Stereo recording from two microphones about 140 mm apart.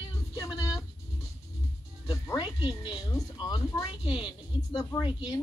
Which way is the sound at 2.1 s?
20° left (ahead or behind).